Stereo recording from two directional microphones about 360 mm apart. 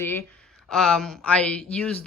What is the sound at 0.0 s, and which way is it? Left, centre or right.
Speech, centre.